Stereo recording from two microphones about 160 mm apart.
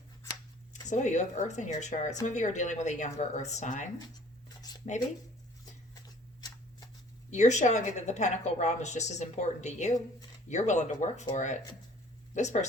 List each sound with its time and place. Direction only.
0.9 s a woman's voice: 45° left (ahead or behind)
4.4 s a sound: 25° left (ahead or behind)
7.3 s a woman's voice: 50° left (ahead or behind)